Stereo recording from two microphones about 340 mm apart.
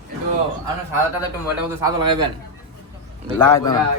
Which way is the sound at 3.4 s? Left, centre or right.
Centre.